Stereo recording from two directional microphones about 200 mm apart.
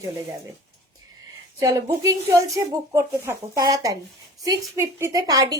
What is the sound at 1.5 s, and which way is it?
A woman's voice, 15° right (ahead or behind).